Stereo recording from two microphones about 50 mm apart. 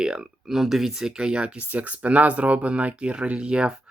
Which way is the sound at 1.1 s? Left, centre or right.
Right.